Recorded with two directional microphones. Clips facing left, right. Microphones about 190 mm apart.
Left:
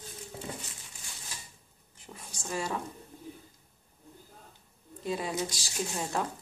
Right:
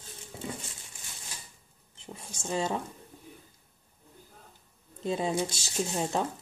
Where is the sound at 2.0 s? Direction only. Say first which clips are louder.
Right 4 dB; 25° right (ahead or behind).